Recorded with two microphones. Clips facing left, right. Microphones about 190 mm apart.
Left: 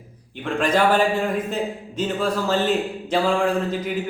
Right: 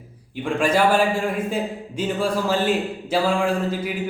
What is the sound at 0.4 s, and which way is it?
A man's voice, 10° right (ahead or behind).